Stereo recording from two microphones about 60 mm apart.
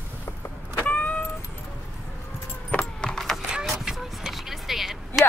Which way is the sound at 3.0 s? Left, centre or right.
Centre.